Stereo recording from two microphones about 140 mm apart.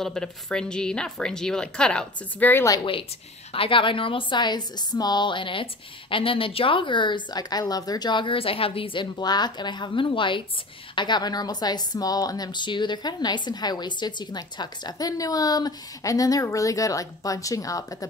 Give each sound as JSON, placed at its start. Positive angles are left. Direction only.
{"t": 0.0, "sound": "a woman's voice", "side_deg": 5}
{"t": 2.8, "sound": "a woman's voice", "side_deg": 40}